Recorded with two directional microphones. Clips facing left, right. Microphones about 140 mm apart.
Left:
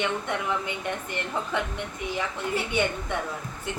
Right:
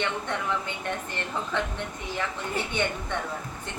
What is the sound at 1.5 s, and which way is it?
Speech, 10° left (ahead or behind).